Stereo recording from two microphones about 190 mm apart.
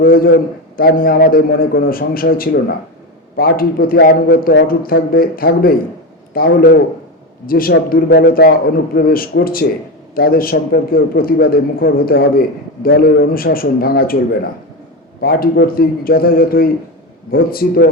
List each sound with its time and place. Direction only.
0.0 s a man's voice: 50° left (ahead or behind)
15.2 s a man's voice: 50° left (ahead or behind)